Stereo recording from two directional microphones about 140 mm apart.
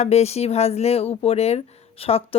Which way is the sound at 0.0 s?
50° left (ahead or behind).